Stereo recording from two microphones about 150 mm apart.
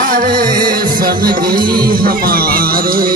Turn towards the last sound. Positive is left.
turn(degrees=-75)  # may be behind; listen again after turning